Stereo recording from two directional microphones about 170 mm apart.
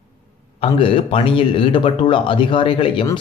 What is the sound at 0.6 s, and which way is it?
A man's voice, 30° left (ahead or behind).